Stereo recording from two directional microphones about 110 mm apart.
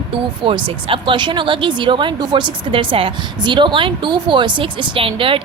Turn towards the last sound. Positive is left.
turn(degrees=-55)  # may be behind; listen again after turning